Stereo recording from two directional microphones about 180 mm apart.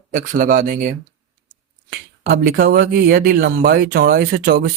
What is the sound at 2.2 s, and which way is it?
Speech, 55° right (ahead or behind).